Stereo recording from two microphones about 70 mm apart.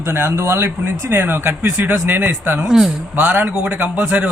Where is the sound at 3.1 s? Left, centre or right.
Right.